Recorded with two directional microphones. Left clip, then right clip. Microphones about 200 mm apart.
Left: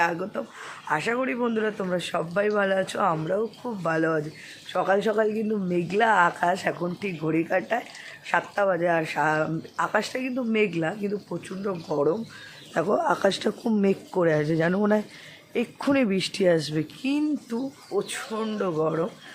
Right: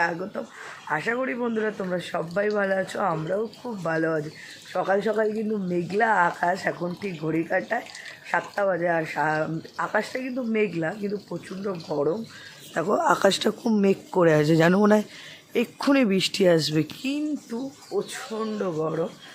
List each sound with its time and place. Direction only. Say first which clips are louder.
0.0 s speech: left 1 dB; 5° left (ahead or behind)
12.9 s speech: right 3 dB; 10° right (ahead or behind)
17.0 s speech: left 2 dB; 20° left (ahead or behind)
17.5 s speech: left 1 dB; 5° left (ahead or behind)